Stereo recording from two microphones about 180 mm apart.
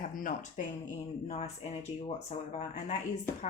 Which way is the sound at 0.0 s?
50° left (ahead or behind).